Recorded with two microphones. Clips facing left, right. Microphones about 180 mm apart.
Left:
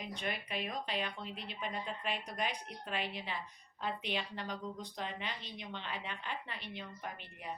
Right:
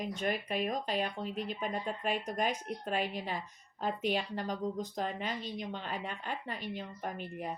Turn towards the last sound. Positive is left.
turn(degrees=-40)  # may be behind; listen again after turning